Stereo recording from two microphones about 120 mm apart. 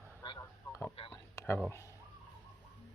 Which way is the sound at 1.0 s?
55° left (ahead or behind).